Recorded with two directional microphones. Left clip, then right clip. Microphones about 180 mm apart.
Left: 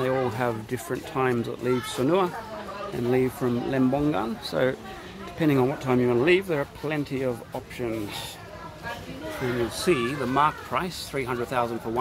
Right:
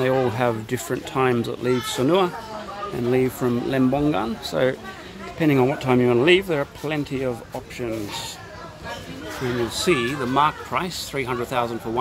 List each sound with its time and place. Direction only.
0.0 s speech: 20° right (ahead or behind); by 8.0 s centre (ahead or behind)
9.8 s speech: 5° right (ahead or behind)